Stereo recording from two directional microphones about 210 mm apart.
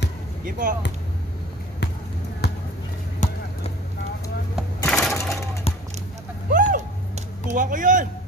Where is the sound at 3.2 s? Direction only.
35° left (ahead or behind).